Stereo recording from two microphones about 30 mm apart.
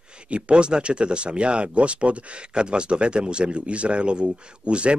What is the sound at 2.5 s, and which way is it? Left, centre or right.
Speech, right.